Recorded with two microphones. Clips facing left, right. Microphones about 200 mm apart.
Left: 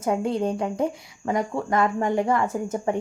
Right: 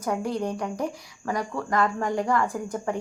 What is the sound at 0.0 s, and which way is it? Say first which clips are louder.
Speech: left 4 dB; 25° left (ahead or behind).